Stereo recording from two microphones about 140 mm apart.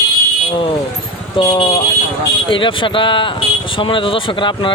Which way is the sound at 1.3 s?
35° left (ahead or behind).